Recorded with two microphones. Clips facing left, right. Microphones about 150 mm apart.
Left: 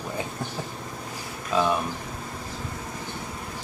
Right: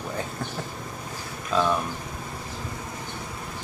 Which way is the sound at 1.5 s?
10° left (ahead or behind).